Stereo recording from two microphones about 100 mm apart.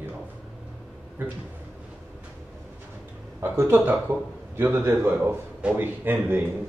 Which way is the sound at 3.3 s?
25° right (ahead or behind).